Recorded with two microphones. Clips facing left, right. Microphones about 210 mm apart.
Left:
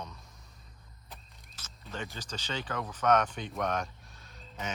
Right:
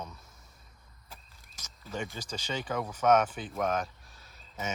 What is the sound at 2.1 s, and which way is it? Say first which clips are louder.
Speech: right 2 dB; 10° right (ahead or behind).